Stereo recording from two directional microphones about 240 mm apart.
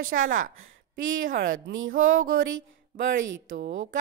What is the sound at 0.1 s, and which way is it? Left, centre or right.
A woman's voice, right.